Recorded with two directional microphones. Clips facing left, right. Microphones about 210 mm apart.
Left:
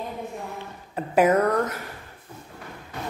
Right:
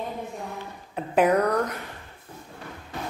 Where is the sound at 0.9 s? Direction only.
Centre (ahead or behind).